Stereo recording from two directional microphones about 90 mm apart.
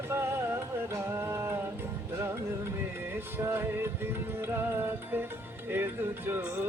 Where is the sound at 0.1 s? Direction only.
30° right (ahead or behind).